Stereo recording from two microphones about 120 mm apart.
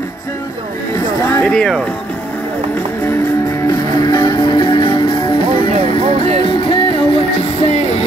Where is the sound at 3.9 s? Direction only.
35° left (ahead or behind).